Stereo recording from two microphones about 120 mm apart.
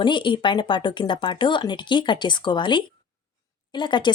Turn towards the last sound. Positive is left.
turn(degrees=40)  # may be behind; listen again after turning